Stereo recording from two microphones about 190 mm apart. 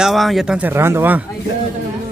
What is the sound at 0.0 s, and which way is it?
Speech, centre (ahead or behind).